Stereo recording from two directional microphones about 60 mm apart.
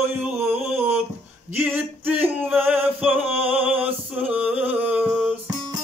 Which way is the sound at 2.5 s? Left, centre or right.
Right.